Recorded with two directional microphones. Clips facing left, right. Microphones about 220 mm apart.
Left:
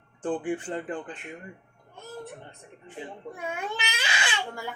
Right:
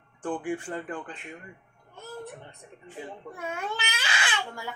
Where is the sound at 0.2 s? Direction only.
20° left (ahead or behind).